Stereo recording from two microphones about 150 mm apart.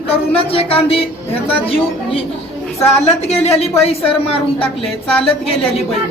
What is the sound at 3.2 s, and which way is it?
Speech, 45° left (ahead or behind).